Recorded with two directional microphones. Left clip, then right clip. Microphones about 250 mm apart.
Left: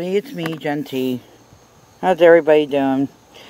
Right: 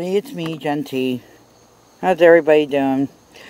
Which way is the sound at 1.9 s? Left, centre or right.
Centre.